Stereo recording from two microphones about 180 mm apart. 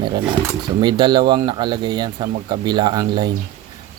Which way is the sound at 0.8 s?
25° right (ahead or behind).